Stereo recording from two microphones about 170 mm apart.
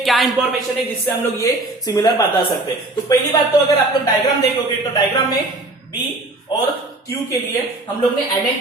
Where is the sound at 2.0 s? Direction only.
25° left (ahead or behind).